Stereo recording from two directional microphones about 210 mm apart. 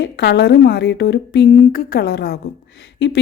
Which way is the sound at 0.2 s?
55° left (ahead or behind).